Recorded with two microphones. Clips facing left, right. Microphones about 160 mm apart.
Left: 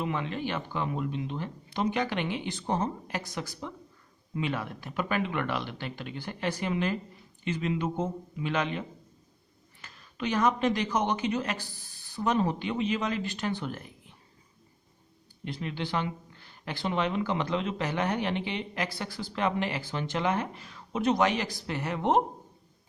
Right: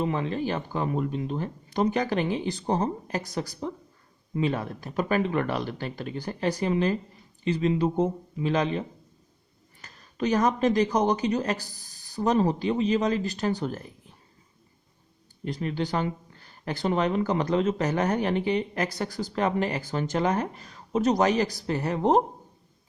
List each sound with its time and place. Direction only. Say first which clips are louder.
0.0 s speech: right 4 dB; 35° right (ahead or behind)
9.8 s speech: right 5 dB; 40° right (ahead or behind)
15.4 s speech: right 5 dB; 40° right (ahead or behind)